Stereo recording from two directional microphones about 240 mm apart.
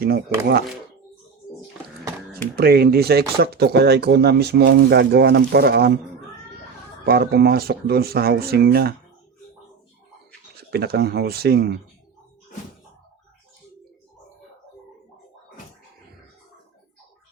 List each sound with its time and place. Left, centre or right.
0.0 s speech: right
2.6 s speech: right
7.0 s speech: right
10.6 s speech: right